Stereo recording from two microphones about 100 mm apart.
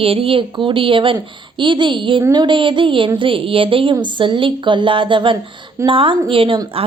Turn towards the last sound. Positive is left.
turn(degrees=-60)  # may be behind; listen again after turning